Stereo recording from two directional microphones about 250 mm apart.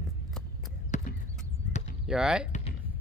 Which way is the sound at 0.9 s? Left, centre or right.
Left.